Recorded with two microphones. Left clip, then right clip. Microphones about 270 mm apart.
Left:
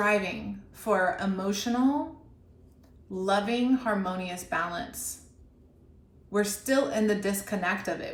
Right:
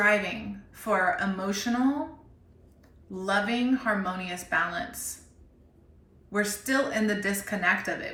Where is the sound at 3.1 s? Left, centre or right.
Centre.